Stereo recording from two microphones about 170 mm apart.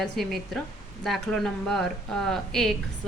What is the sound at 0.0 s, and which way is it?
A woman's voice, centre (ahead or behind).